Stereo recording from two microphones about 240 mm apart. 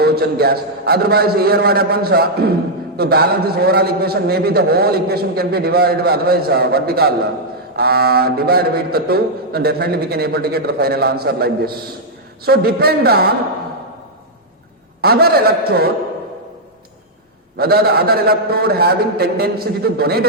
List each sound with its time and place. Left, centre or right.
0.0 s a man's voice: right
15.0 s a man's voice: right
17.6 s a man's voice: right